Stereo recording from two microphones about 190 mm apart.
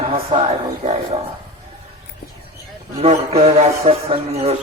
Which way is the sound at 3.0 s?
30° right (ahead or behind).